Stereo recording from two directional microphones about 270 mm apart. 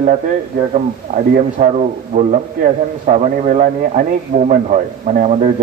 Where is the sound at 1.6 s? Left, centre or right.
Right.